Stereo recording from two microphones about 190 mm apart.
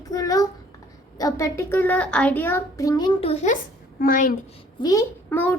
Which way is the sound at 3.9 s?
45° left (ahead or behind).